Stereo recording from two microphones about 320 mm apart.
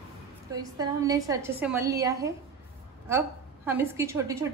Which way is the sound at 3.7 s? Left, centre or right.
Centre.